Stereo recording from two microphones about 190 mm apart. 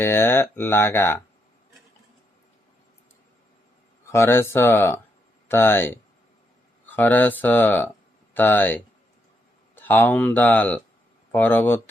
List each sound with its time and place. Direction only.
0.0 s speech: 10° left (ahead or behind)
4.1 s speech: 15° left (ahead or behind)